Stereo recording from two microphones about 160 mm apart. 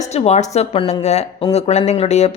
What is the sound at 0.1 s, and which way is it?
A woman's voice, 40° left (ahead or behind).